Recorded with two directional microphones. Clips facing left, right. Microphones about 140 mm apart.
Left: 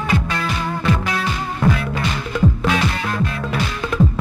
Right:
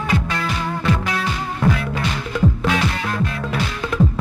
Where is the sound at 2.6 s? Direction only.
15° left (ahead or behind).